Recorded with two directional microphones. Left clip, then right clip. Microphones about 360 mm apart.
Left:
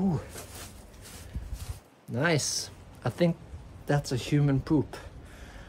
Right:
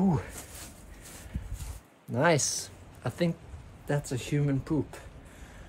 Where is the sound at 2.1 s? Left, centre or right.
Centre.